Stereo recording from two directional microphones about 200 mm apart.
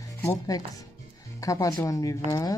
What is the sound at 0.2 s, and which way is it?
Speech, 10° left (ahead or behind).